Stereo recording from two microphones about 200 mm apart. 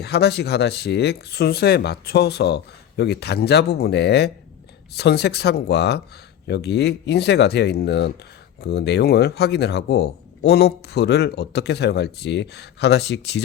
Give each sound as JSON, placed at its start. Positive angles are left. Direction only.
{"t": 0.0, "sound": "speech", "side_deg": 55}